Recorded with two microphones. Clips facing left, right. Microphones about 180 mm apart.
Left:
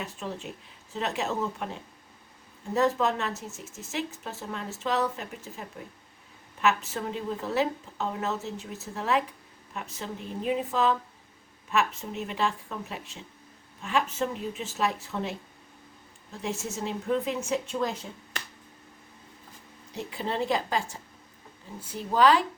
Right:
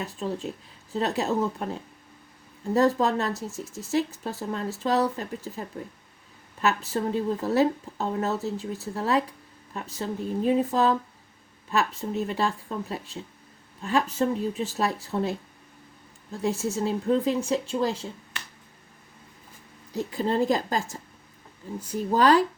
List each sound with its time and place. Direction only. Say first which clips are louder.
0.0 s speech: right 5 dB; 35° right (ahead or behind)
2.7 s speech: right 3 dB; 35° right (ahead or behind)
6.6 s speech: right 1 dB; 35° right (ahead or behind)
16.4 s speech: right 6 dB; 35° right (ahead or behind)
19.9 s speech: right 6 dB; 40° right (ahead or behind)